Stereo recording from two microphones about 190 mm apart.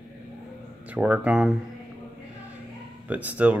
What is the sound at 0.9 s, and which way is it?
Speech, 10° right (ahead or behind).